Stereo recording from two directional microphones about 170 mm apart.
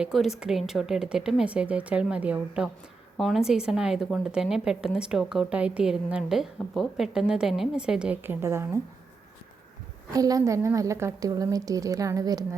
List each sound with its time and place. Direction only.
0.0 s a woman's voice: centre (ahead or behind)
10.1 s a woman's voice: 20° right (ahead or behind)